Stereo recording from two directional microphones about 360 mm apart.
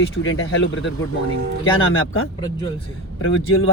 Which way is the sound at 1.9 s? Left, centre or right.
Left.